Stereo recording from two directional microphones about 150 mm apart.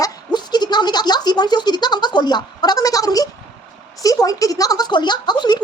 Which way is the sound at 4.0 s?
25° left (ahead or behind).